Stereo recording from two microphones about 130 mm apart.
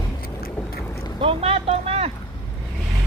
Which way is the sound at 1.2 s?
45° right (ahead or behind).